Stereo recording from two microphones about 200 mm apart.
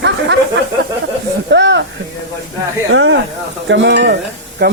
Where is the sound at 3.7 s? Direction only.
65° right (ahead or behind).